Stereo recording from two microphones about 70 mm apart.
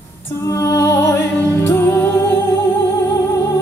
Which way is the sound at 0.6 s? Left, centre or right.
Left.